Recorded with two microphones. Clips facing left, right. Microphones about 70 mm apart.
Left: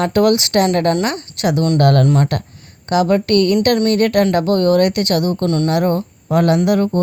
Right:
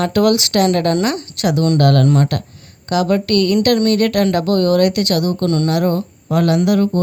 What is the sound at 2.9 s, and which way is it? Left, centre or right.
Speech, left.